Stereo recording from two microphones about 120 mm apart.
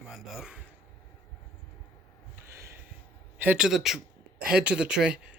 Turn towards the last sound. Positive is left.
turn(degrees=-10)  # may be behind; listen again after turning